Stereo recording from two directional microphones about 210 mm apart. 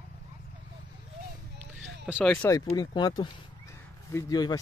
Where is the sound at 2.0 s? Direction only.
Centre (ahead or behind).